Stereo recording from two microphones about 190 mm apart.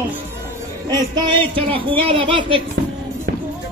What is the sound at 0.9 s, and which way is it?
Speech, 25° right (ahead or behind).